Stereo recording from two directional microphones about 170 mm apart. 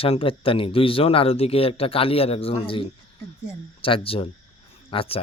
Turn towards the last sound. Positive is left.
turn(degrees=35)  # may be behind; listen again after turning